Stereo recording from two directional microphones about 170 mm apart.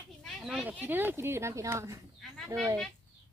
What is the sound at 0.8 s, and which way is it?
Speech, 10° right (ahead or behind).